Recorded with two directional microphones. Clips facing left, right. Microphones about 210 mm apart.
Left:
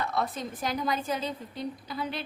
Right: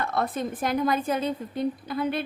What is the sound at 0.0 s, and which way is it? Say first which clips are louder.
A woman's voice: right 4 dB; 55° right (ahead or behind).